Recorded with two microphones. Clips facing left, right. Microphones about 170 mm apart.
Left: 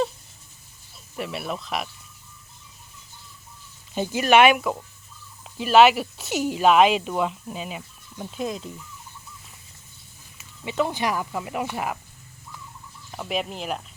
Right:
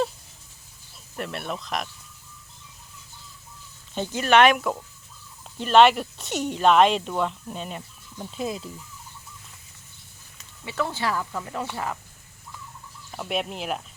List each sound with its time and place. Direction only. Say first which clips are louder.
1.1 s speech: left 1 dB; 5° left (ahead or behind)
3.9 s speech: left 2 dB; 10° left (ahead or behind)
10.6 s speech: left 3 dB; 20° left (ahead or behind)
13.1 s speech: even; centre (ahead or behind)